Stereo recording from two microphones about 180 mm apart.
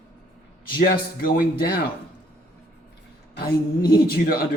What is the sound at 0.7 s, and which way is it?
Speech, 60° left (ahead or behind).